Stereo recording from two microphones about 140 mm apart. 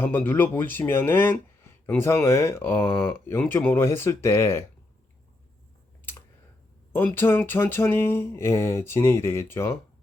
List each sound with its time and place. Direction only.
0.0 s speech: 15° left (ahead or behind)
6.9 s speech: 15° left (ahead or behind)